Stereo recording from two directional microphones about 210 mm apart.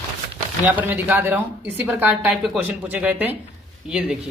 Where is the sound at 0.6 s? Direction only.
10° right (ahead or behind).